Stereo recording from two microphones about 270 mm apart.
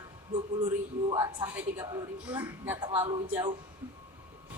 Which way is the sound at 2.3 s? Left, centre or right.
Centre.